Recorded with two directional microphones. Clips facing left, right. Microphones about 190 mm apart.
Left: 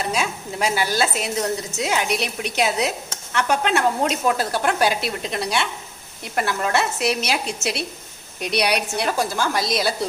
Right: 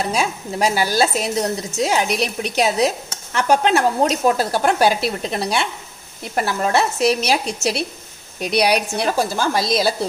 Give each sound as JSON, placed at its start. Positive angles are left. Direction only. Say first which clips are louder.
{"t": 0.1, "sound": "a woman's voice", "louder": "right 3 dB", "side_deg": -40}